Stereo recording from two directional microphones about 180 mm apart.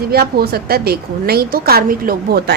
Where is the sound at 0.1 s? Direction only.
60° right (ahead or behind).